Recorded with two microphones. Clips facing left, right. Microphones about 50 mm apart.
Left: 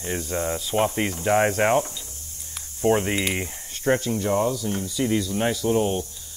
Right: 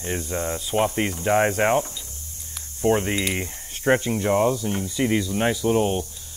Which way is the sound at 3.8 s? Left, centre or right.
Right.